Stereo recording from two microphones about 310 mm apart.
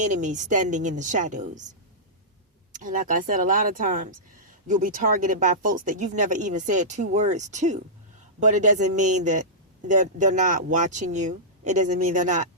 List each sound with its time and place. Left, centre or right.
0.0 s speech: right
2.7 s speech: right